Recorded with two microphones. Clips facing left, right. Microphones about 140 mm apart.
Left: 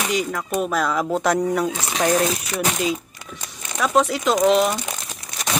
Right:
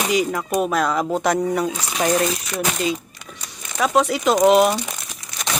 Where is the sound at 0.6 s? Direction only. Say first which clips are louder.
Right 1 dB; centre (ahead or behind).